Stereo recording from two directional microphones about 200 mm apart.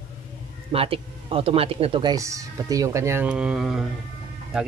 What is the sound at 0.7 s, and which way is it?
Speech, 30° right (ahead or behind).